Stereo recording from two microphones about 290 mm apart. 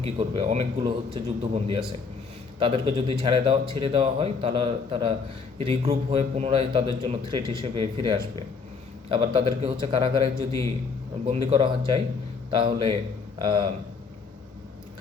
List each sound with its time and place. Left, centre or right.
0.0 s a man's voice: right
11.3 s a man's voice: centre